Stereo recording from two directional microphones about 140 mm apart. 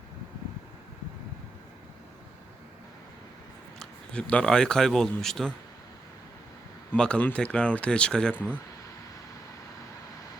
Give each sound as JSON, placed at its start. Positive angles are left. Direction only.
{"t": 3.8, "sound": "a man's voice", "side_deg": 5}
{"t": 6.9, "sound": "speech", "side_deg": 5}